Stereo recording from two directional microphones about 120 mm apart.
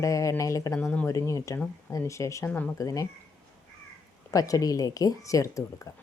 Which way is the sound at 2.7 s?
30° left (ahead or behind).